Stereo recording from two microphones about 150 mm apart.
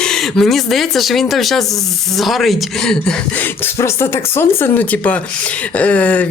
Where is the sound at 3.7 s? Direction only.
15° left (ahead or behind).